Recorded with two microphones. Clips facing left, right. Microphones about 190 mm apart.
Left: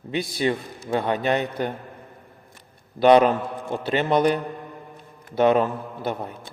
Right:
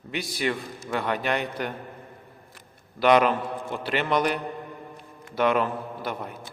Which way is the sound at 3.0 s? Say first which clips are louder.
Left 4 dB; 30° left (ahead or behind).